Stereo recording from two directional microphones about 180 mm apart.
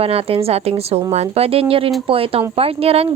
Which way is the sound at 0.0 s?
30° right (ahead or behind).